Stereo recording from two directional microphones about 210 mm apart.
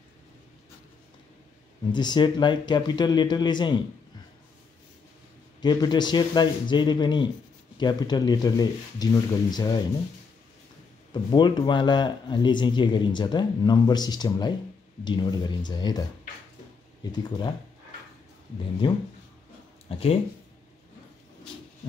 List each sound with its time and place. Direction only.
1.9 s speech: 20° left (ahead or behind)
5.6 s speech: 20° left (ahead or behind)
11.1 s speech: 20° left (ahead or behind)
18.8 s speech: 20° left (ahead or behind)